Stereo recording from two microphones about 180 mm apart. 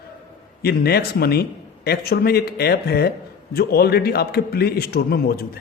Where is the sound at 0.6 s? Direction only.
60° left (ahead or behind).